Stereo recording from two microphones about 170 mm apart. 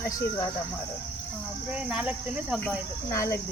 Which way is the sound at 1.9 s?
5° right (ahead or behind).